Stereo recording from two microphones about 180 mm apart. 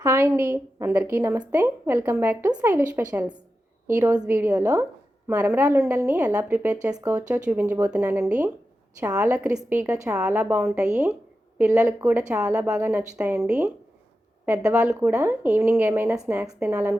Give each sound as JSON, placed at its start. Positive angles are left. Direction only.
{"t": 0.0, "sound": "a woman's voice", "side_deg": -15}